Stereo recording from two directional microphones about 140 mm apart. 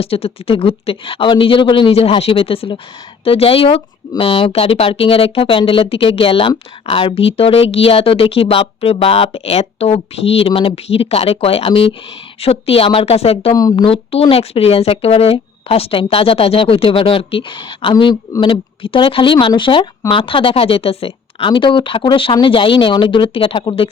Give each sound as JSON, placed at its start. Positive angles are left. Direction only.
{"t": 0.0, "sound": "speech", "side_deg": 45}
{"t": 13.6, "sound": "speech", "side_deg": 25}
{"t": 13.8, "sound": "speech", "side_deg": 45}